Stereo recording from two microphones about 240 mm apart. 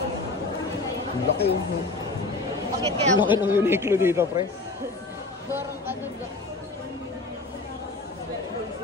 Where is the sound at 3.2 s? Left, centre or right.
Centre.